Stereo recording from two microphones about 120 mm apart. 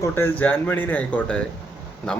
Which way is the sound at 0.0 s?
20° left (ahead or behind).